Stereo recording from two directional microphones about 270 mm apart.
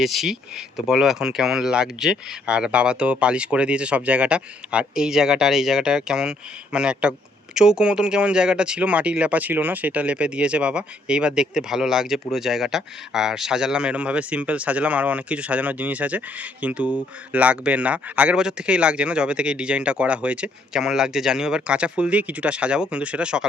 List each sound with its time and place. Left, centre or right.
0.0 s speech: centre